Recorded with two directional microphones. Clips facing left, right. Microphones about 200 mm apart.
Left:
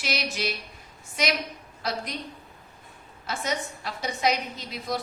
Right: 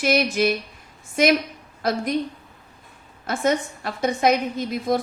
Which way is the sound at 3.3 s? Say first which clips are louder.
Right 8 dB; 55° right (ahead or behind).